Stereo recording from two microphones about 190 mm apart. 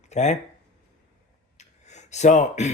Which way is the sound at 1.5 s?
35° left (ahead or behind).